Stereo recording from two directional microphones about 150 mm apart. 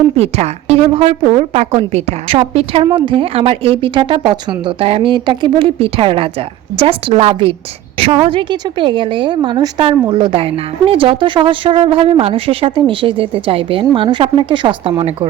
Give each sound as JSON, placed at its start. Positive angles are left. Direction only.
{"t": 0.2, "sound": "a woman's voice", "side_deg": -45}